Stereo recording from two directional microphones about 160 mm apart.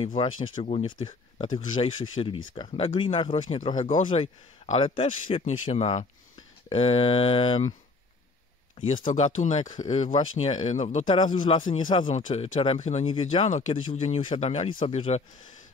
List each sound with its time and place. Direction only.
0.0 s speech: 30° left (ahead or behind)
8.7 s speech: 35° left (ahead or behind)
9.0 s speech: 45° left (ahead or behind)
13.0 s speech: 35° left (ahead or behind)